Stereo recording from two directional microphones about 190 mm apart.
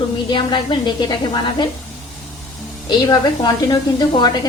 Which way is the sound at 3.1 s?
20° left (ahead or behind).